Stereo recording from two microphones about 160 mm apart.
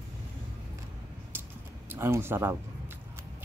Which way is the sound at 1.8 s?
15° right (ahead or behind).